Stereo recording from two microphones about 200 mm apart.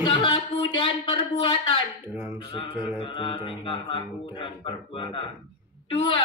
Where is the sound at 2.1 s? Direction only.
10° right (ahead or behind).